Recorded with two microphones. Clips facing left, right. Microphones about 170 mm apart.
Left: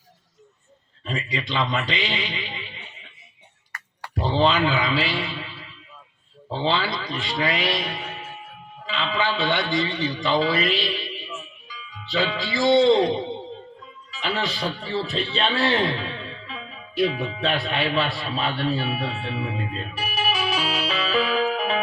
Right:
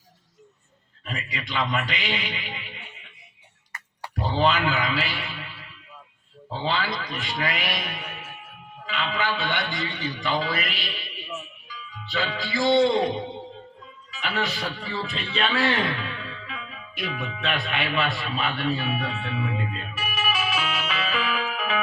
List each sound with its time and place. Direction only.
1.0 s a man's voice: 30° left (ahead or behind)
4.1 s a man's voice: 30° left (ahead or behind)
12.6 s a man's voice: 25° left (ahead or behind)
14.2 s a man's voice: 30° left (ahead or behind)
20.3 s music: 35° left (ahead or behind)